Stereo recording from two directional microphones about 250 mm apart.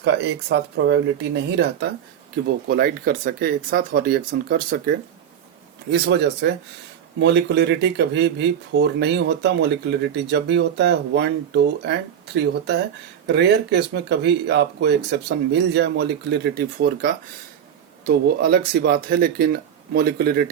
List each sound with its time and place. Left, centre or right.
0.0 s speech: right